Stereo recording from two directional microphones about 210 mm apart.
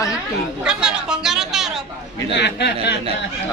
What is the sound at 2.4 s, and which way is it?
Speech, 55° left (ahead or behind).